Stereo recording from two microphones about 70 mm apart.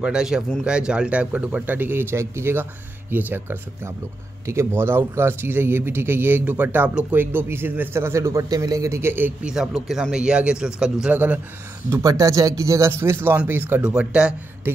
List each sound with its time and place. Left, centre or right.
0.0 s a man's voice: centre; by 2.6 s right
3.1 s speech: right
8.4 s a man's voice: right
9.4 s a man's voice: centre
11.1 s speech: right
12.0 s speech: right
12.9 s speech: right
13.8 s a man's voice: centre